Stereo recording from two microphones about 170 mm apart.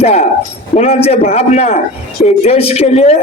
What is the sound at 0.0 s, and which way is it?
A man's voice, 40° left (ahead or behind).